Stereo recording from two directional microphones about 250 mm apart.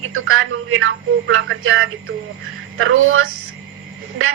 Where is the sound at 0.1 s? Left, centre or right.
Right.